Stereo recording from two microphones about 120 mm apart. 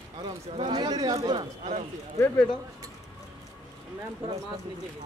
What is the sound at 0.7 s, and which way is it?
Speech, 35° right (ahead or behind).